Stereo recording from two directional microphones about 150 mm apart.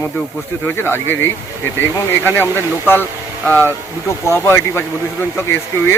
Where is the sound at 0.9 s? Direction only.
15° left (ahead or behind).